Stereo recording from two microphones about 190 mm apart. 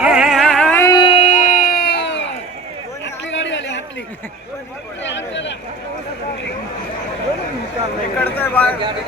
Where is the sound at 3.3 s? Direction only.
75° left (ahead or behind).